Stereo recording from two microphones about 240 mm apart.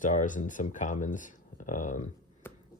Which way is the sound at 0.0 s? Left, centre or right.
Left.